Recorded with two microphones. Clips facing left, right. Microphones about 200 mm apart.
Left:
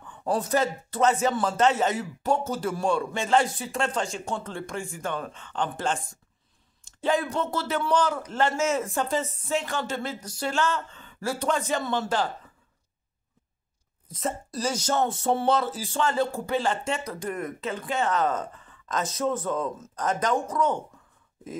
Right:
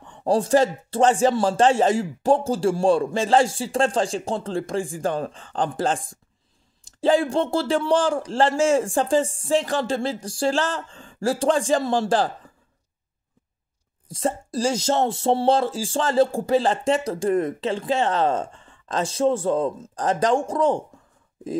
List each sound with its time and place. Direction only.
0.0 s speech: 30° right (ahead or behind)
14.1 s speech: 30° right (ahead or behind)